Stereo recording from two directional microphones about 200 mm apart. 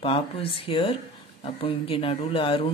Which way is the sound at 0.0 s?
25° left (ahead or behind).